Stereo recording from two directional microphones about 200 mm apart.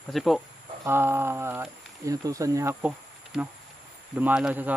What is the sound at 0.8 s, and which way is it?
Speech, 10° right (ahead or behind).